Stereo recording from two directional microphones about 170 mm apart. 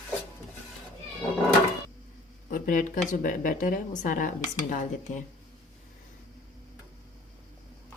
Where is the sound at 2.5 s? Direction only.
50° left (ahead or behind).